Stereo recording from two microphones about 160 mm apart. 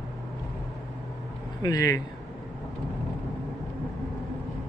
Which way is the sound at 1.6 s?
25° left (ahead or behind).